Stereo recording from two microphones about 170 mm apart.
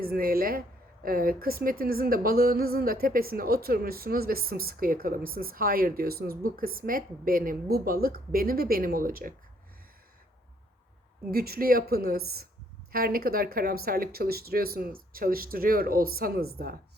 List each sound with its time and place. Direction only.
0.0 s speech: 60° right (ahead or behind)
11.3 s speech: 65° right (ahead or behind)